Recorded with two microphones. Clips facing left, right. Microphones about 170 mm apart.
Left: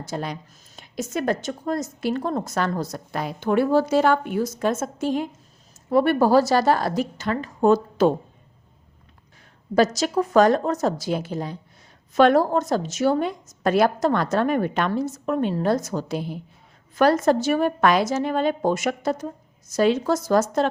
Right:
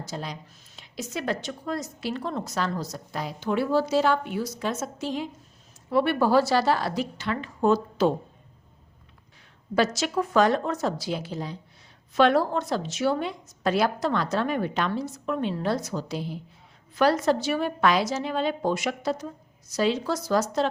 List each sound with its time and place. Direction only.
0.0 s a woman's voice: 55° left (ahead or behind)
9.7 s a woman's voice: 40° left (ahead or behind)